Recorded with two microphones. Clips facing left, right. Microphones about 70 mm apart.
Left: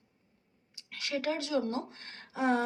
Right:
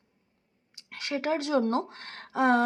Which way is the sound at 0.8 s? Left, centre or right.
Right.